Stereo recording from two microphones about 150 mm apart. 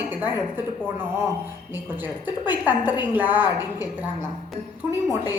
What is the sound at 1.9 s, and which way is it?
A woman's voice, 10° right (ahead or behind).